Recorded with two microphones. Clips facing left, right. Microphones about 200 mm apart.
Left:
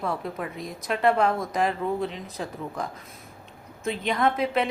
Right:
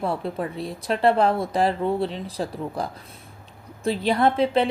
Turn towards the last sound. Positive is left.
turn(degrees=-30)  # may be behind; listen again after turning